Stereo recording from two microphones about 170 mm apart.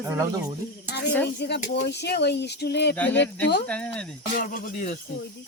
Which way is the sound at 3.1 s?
90° left.